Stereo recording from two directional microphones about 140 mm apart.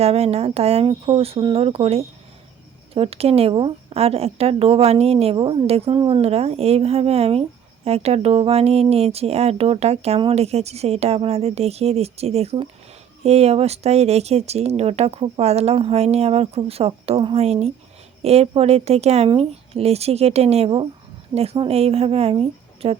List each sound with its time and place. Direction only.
0.0 s speech: 45° right (ahead or behind)